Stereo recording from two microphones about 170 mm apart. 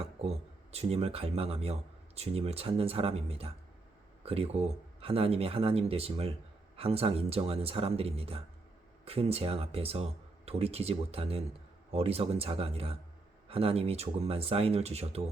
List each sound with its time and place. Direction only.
0.2 s speech: 40° right (ahead or behind)